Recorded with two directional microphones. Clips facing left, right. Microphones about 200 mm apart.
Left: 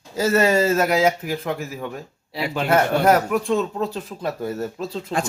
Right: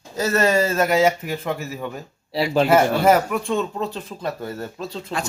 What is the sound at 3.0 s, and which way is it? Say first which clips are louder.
Speech: even; centre (ahead or behind).